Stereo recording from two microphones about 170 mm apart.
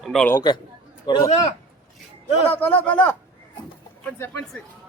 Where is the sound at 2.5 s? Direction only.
10° left (ahead or behind).